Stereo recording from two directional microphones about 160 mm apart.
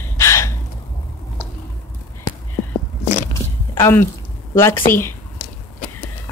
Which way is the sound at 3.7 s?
15° left (ahead or behind).